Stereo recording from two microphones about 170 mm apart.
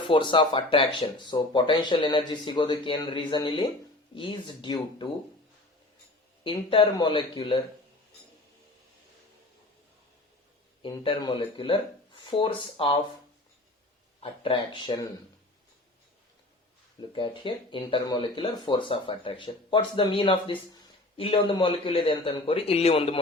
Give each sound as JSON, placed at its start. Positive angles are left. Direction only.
{"t": 0.1, "sound": "speech", "side_deg": 30}
{"t": 6.4, "sound": "speech", "side_deg": 30}
{"t": 10.8, "sound": "speech", "side_deg": 30}
{"t": 14.2, "sound": "speech", "side_deg": 30}
{"t": 17.1, "sound": "speech", "side_deg": 30}